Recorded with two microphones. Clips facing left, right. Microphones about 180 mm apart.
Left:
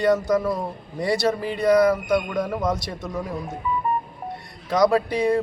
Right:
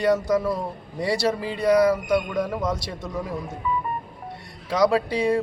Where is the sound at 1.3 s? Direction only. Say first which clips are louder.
Left 1 dB; 10° right (ahead or behind).